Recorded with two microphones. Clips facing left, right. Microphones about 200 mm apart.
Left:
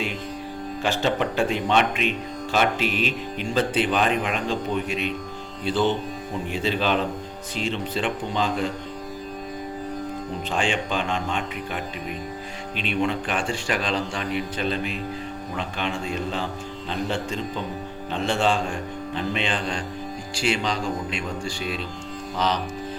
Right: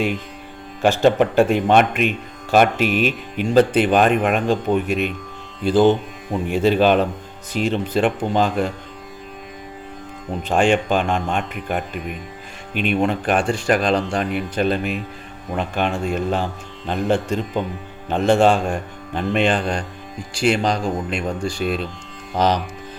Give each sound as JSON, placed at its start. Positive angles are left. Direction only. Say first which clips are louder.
{"t": 0.8, "sound": "speech", "louder": "right 9 dB", "side_deg": -50}
{"t": 10.5, "sound": "speech", "louder": "right 9 dB", "side_deg": -50}